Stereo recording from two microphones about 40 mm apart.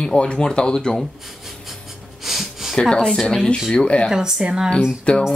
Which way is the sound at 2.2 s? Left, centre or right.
Centre.